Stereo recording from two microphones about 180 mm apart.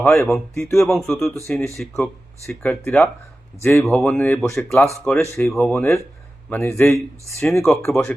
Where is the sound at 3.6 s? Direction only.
15° left (ahead or behind).